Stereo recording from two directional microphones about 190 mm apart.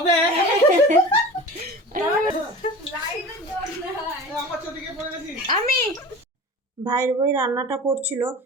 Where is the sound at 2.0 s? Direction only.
50° right (ahead or behind).